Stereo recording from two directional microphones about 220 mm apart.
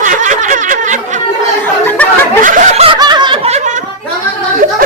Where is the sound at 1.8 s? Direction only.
10° left (ahead or behind).